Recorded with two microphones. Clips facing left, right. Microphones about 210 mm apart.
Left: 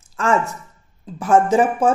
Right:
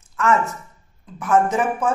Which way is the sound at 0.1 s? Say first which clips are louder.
Even; 30° left (ahead or behind).